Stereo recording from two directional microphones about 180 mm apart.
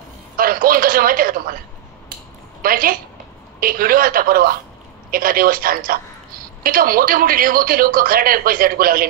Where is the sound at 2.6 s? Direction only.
55° right (ahead or behind).